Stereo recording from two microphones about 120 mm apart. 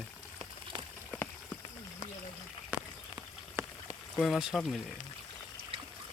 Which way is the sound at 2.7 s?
10° right (ahead or behind).